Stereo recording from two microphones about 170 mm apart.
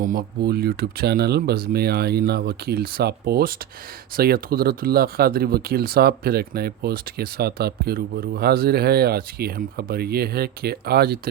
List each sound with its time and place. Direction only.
0.0 s speech: 55° right (ahead or behind)